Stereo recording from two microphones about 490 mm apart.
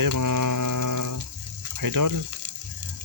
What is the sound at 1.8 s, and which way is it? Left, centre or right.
Typing, right.